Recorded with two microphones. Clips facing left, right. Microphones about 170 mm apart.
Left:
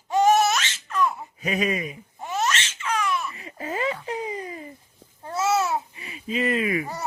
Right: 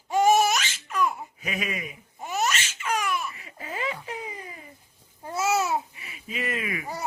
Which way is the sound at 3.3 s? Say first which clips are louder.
Left 5 dB; 35° left (ahead or behind).